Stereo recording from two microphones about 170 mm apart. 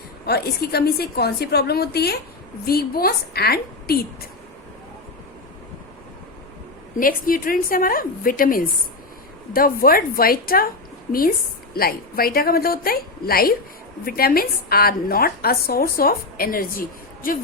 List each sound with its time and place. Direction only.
0.3 s a woman's voice: 70° left (ahead or behind)
6.9 s a woman's voice: 55° left (ahead or behind)
11.7 s a woman's voice: 60° left (ahead or behind)